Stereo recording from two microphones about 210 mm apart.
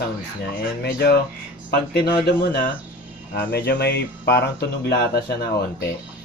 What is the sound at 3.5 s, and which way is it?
Speech, 50° left (ahead or behind).